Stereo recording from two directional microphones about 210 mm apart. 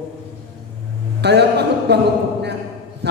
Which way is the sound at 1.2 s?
55° right (ahead or behind).